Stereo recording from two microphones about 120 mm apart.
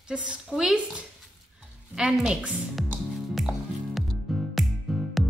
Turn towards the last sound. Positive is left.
turn(degrees=0)  # may be behind; listen again after turning